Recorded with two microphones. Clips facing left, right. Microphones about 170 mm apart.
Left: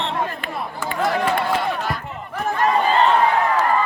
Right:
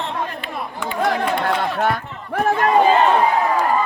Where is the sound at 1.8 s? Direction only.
65° right (ahead or behind).